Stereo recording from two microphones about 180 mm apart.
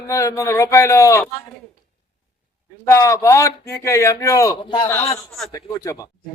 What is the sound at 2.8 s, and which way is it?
A man's voice, 15° left (ahead or behind).